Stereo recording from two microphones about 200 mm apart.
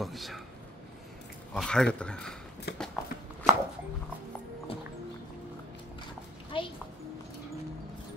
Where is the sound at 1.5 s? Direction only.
5° left (ahead or behind).